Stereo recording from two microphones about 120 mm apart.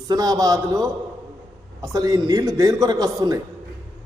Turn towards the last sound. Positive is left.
turn(degrees=-30)  # may be behind; listen again after turning